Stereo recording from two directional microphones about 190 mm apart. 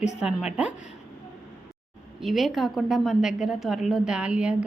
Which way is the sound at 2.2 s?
Centre (ahead or behind).